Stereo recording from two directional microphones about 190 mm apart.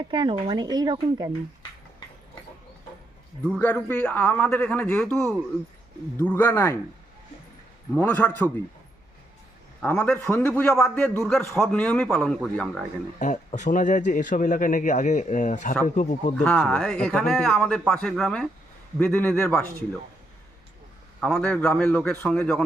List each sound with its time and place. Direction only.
0.0 s speech: 25° right (ahead or behind)
3.6 s speech: 10° left (ahead or behind)
7.9 s speech: 10° left (ahead or behind)
9.8 s a man's voice: 5° left (ahead or behind)
13.1 s a man's voice: 40° left (ahead or behind)
16.4 s a man's voice: 5° left (ahead or behind)
21.2 s a man's voice: 5° left (ahead or behind)